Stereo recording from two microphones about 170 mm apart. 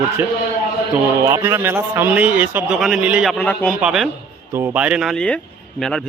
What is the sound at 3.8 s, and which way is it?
Speech, 5° right (ahead or behind).